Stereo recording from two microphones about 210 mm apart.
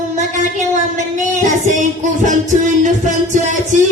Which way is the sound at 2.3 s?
35° right (ahead or behind).